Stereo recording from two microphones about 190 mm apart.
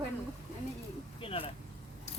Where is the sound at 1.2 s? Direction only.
30° left (ahead or behind).